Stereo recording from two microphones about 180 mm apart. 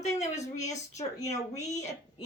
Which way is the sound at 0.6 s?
40° left (ahead or behind).